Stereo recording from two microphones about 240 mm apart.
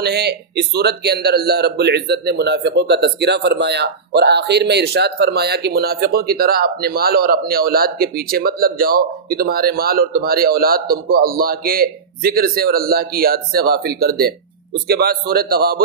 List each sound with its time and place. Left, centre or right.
0.0 s a man's voice: right